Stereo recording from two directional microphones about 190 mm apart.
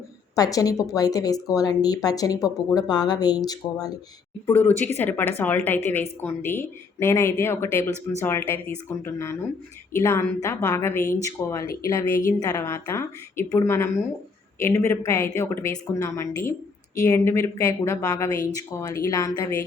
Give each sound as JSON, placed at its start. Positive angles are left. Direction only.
{"t": 0.3, "sound": "speech", "side_deg": 20}
{"t": 4.4, "sound": "a woman's voice", "side_deg": 10}